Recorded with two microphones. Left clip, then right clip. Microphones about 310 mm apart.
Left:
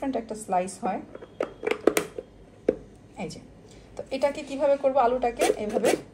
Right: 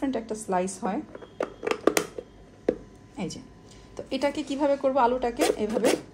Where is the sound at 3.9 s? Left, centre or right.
Right.